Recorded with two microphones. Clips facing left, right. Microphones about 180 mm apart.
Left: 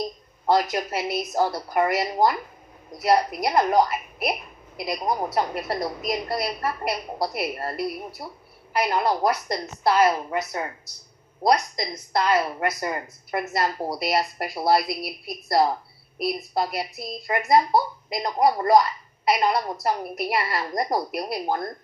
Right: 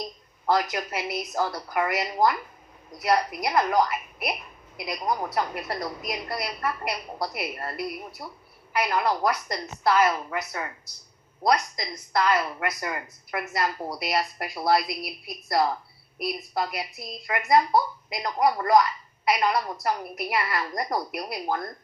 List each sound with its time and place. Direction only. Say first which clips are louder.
0.4 s speech: left 3 dB; 30° left (ahead or behind)